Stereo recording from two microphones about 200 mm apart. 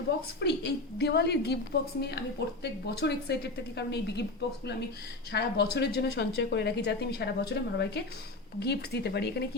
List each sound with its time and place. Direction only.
0.3 s speech: 55° left (ahead or behind)
2.9 s speech: 55° left (ahead or behind)